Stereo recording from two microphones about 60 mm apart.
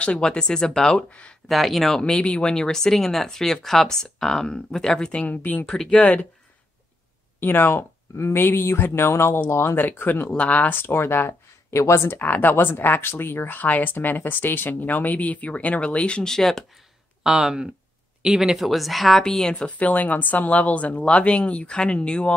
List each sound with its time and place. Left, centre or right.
0.0 s speech: centre
1.5 s a woman's voice: centre
2.0 s speech: centre
5.2 s speech: left
5.7 s speech: centre
7.3 s speech: left
9.8 s speech: left
10.8 s speech: left
12.2 s speech: left; by 16.6 s centre
17.2 s a woman's voice: centre
19.5 s speech: left